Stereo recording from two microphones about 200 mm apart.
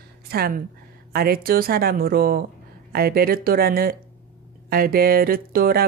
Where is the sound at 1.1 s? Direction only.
50° right (ahead or behind).